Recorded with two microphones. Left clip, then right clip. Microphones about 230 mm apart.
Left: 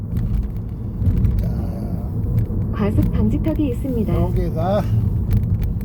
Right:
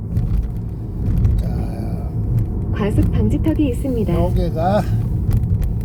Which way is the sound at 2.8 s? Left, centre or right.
Right.